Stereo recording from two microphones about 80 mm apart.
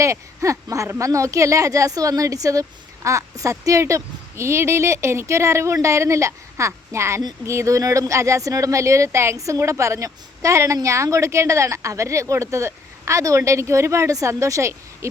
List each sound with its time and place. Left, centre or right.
0.0 s speech: right